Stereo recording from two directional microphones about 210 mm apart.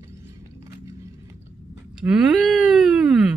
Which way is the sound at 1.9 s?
5° right (ahead or behind).